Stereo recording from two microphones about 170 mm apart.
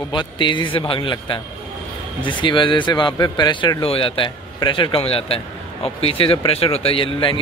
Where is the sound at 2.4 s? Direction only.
30° left (ahead or behind).